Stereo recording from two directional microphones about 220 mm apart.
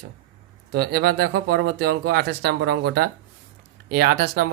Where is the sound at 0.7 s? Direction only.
45° right (ahead or behind).